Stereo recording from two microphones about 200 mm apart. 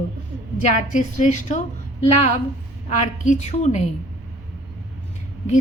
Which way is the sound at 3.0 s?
35° left (ahead or behind).